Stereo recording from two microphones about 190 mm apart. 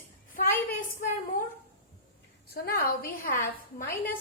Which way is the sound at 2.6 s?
50° left (ahead or behind).